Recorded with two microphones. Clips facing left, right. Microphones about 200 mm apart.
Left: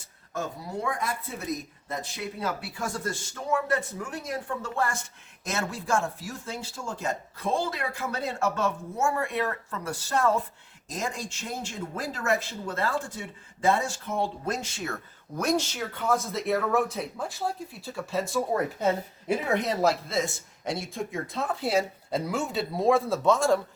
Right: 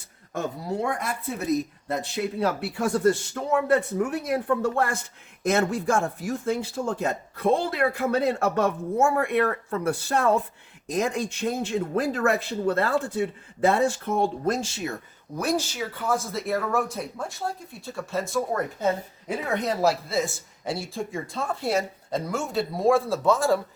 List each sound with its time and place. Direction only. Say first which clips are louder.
1.9 s speech: right 5 dB; 70° right (ahead or behind)
14.4 s speech: right 6 dB; 35° right (ahead or behind)
15.4 s speech: right 1 dB; 5° right (ahead or behind)